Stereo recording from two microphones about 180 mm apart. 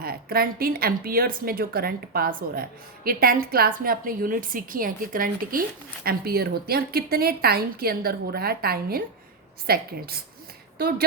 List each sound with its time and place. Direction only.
0.0 s a woman's voice: 55° right (ahead or behind)